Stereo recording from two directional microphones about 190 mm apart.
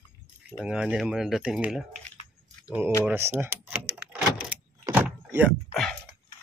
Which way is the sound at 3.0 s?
10° right (ahead or behind).